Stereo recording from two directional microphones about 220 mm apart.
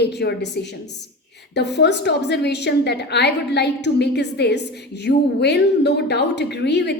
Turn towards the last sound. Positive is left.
turn(degrees=50)  # may be behind; listen again after turning